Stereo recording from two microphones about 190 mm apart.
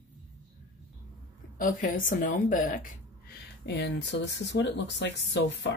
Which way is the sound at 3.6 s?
65° left (ahead or behind).